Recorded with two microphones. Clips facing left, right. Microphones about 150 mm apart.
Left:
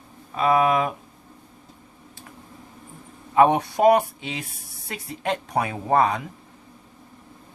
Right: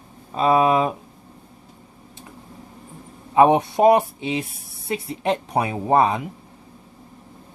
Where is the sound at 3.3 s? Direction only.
20° right (ahead or behind).